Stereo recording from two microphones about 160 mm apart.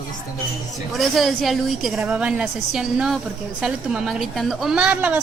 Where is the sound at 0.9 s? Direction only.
Centre (ahead or behind).